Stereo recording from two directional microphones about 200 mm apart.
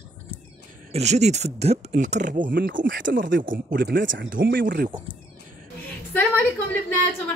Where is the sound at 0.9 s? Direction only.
35° right (ahead or behind).